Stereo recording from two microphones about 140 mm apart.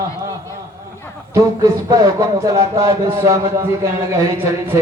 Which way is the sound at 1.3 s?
25° right (ahead or behind).